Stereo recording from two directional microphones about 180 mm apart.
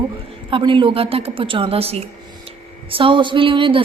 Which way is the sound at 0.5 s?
25° right (ahead or behind).